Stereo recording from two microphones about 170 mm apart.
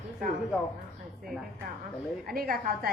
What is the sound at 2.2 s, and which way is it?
Speech, 60° right (ahead or behind).